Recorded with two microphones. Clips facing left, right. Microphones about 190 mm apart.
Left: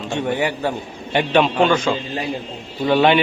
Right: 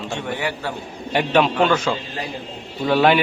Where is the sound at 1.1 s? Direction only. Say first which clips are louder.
Left 1 dB; centre (ahead or behind).